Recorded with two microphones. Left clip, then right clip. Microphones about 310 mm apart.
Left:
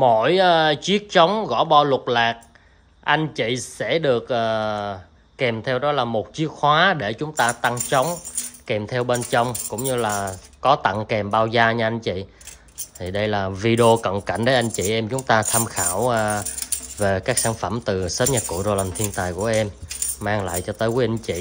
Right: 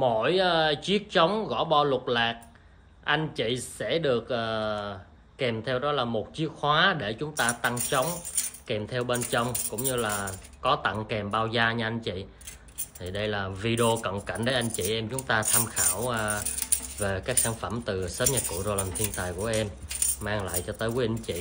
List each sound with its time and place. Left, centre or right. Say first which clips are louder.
0.0 s speech: left 8 dB; left